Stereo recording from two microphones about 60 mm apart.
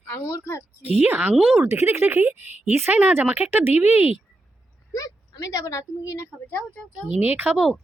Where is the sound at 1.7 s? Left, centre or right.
Right.